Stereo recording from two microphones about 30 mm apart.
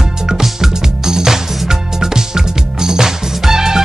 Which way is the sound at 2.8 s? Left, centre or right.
Centre.